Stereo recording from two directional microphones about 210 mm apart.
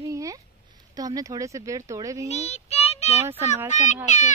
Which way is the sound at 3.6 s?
35° left (ahead or behind).